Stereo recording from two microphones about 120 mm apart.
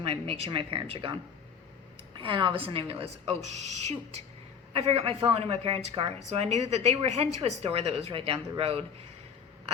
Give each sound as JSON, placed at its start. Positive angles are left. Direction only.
{"t": 0.0, "sound": "a woman's voice", "side_deg": -55}
{"t": 2.1, "sound": "a woman's voice", "side_deg": -45}
{"t": 4.7, "sound": "a woman's voice", "side_deg": -55}